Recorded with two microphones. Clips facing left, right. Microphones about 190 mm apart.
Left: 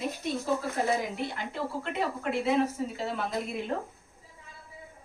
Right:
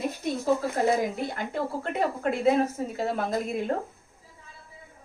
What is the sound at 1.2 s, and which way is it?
Speech, 45° right (ahead or behind).